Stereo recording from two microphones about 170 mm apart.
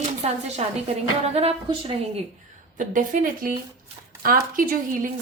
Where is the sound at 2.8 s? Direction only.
50° right (ahead or behind).